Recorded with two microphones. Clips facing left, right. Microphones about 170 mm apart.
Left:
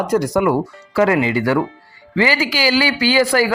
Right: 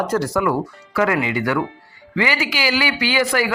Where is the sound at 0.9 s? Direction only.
30° left (ahead or behind).